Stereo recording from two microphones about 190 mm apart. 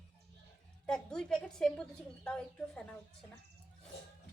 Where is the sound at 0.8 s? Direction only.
5° left (ahead or behind).